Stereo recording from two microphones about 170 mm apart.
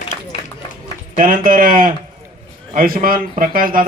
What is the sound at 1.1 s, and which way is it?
A man's voice, 55° right (ahead or behind).